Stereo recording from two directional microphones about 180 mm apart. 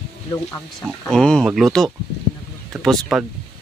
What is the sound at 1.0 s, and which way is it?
Speech, 5° left (ahead or behind).